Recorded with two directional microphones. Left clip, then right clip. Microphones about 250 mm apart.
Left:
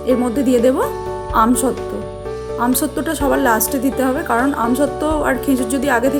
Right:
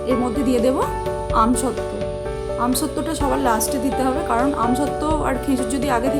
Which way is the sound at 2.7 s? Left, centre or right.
Centre.